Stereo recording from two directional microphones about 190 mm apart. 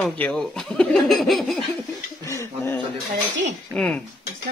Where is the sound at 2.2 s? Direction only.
15° left (ahead or behind).